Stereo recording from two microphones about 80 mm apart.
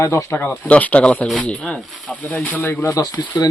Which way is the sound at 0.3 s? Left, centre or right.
Left.